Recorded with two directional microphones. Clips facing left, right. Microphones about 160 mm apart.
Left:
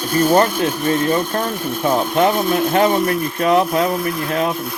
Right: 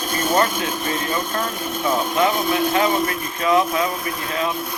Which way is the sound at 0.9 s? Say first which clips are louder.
Left 8 dB; 35° left (ahead or behind).